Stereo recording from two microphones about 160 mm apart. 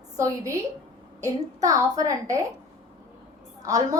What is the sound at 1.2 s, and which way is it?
A woman's voice, 20° right (ahead or behind).